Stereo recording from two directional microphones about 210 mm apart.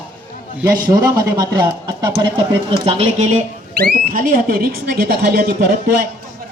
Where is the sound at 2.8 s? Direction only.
30° right (ahead or behind).